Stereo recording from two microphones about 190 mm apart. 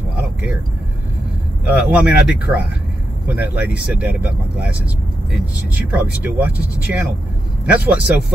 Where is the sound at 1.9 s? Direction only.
5° right (ahead or behind).